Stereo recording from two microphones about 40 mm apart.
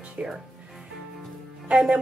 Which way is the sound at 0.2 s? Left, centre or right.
Right.